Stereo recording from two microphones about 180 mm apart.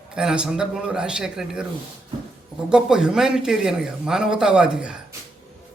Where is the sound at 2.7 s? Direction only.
5° right (ahead or behind).